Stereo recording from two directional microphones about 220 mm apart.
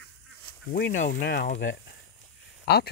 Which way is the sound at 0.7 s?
35° left (ahead or behind).